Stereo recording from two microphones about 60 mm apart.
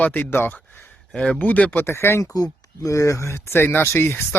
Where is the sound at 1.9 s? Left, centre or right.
Left.